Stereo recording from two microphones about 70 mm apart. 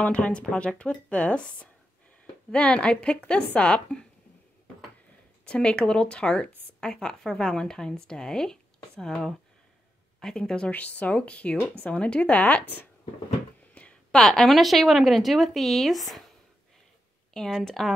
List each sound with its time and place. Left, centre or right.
0.0 s speech: centre
5.4 s speech: centre
13.8 s a sound: centre
14.1 s speech: centre
17.3 s speech: centre